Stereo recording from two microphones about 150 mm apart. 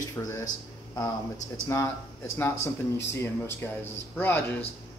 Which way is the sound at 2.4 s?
20° left (ahead or behind).